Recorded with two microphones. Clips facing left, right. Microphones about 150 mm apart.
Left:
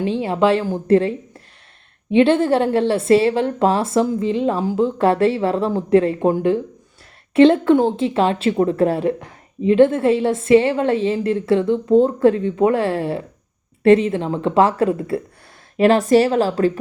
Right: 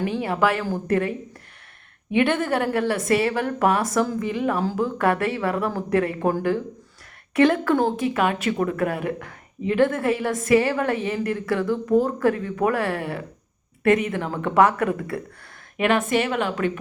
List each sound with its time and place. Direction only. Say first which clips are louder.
0.0 s speech: left 4 dB; 25° left (ahead or behind)